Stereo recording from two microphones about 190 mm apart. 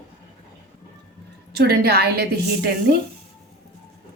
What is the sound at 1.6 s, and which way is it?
A woman's voice, 55° right (ahead or behind).